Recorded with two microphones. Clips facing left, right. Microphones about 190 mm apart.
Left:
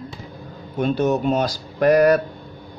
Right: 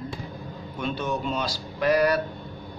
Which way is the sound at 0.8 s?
40° left (ahead or behind).